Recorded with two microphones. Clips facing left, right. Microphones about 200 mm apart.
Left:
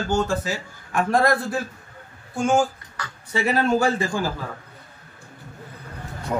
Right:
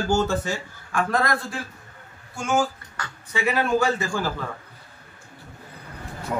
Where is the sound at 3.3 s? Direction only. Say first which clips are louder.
Left 2 dB; 40° left (ahead or behind).